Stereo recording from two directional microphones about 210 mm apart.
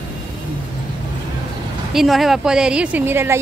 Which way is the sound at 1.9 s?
Centre (ahead or behind).